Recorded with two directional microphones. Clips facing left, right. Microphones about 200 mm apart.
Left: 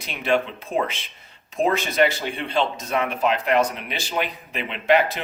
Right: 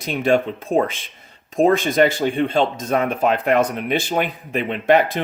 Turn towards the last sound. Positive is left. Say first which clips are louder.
# right 3 dB
turn(degrees=-50)  # may be behind; listen again after turning